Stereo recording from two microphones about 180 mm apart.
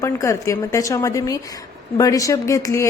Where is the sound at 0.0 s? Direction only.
15° left (ahead or behind).